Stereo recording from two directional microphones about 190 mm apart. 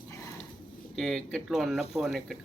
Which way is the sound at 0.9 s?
Centre (ahead or behind).